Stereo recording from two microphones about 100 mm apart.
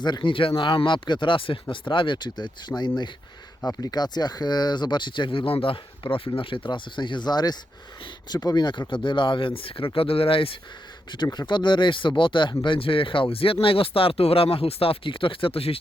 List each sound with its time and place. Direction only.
0.0 s speech: 50° left (ahead or behind); by 10.6 s 65° left (ahead or behind)
11.1 s speech: 45° left (ahead or behind); by 15.8 s 70° left (ahead or behind)